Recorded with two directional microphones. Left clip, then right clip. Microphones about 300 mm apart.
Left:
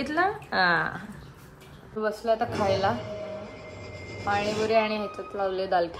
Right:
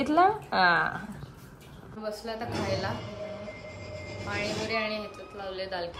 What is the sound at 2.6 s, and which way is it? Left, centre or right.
Speech, centre.